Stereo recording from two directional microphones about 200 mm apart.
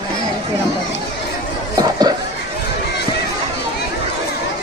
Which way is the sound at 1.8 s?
20° right (ahead or behind).